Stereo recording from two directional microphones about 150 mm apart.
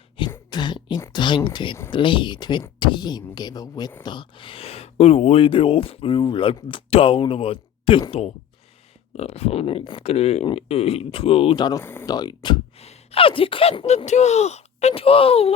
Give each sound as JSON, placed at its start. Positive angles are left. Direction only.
{"t": 0.2, "sound": "throat clearing", "side_deg": 35}
{"t": 0.5, "sound": "beatboxing", "side_deg": 30}
{"t": 1.0, "sound": "speech", "side_deg": 30}
{"t": 11.8, "sound": "speech", "side_deg": 15}
{"t": 12.0, "sound": "speech", "side_deg": 25}
{"t": 12.8, "sound": "speech", "side_deg": 45}